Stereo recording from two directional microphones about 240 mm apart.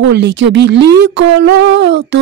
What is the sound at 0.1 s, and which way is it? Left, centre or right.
Speech, right.